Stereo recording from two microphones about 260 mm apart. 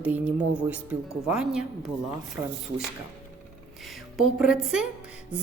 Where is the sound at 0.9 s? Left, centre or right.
Centre.